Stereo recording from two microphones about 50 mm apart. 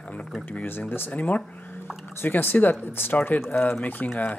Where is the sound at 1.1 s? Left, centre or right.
Left.